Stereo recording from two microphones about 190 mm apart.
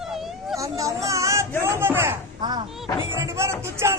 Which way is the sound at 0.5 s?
15° right (ahead or behind).